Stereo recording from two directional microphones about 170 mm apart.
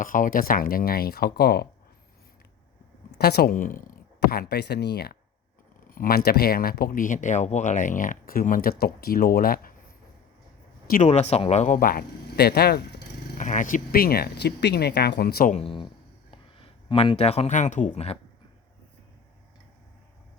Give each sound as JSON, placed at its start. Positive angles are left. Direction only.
{"t": 0.0, "sound": "speech", "side_deg": 55}
{"t": 3.2, "sound": "speech", "side_deg": 70}
{"t": 4.3, "sound": "speech", "side_deg": 70}
{"t": 5.9, "sound": "speech", "side_deg": 60}
{"t": 11.0, "sound": "speech", "side_deg": 40}
{"t": 13.3, "sound": "speech", "side_deg": 45}
{"t": 15.5, "sound": "speech", "side_deg": 30}